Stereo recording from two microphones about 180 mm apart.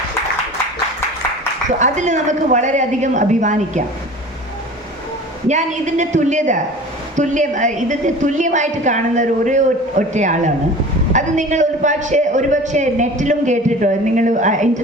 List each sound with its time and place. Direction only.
1.8 s a woman's voice: 40° right (ahead or behind)
5.5 s a woman's voice: 40° right (ahead or behind)